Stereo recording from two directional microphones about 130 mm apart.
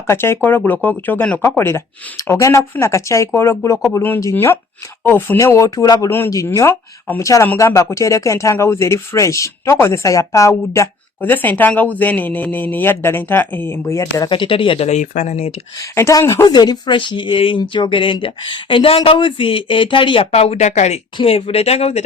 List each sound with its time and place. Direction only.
0.1 s speech: 20° left (ahead or behind)
6.1 s speech: 20° left (ahead or behind)
14.3 s speech: 40° left (ahead or behind)
14.8 s speech: 70° left (ahead or behind)
15.8 s speech: 25° left (ahead or behind); by 21.0 s 60° left (ahead or behind)
21.2 s speech: 50° left (ahead or behind)